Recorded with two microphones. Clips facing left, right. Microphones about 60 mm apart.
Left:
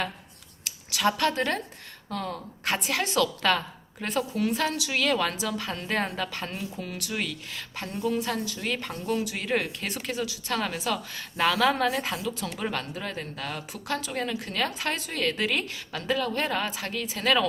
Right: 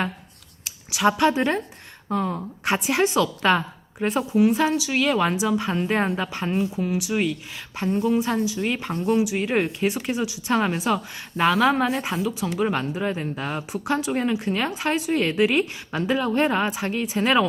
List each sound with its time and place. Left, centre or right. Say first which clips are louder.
0.6 s a sound: right 2 dB; centre
1.0 s speech: right 6 dB; centre
6.7 s speech: right 9 dB; centre